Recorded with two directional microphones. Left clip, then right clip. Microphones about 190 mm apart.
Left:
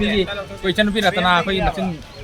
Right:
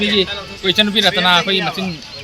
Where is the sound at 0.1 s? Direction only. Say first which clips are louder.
Right 4 dB; 20° left (ahead or behind).